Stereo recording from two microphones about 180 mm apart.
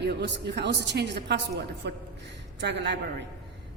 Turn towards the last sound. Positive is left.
turn(degrees=-70)  # may be behind; listen again after turning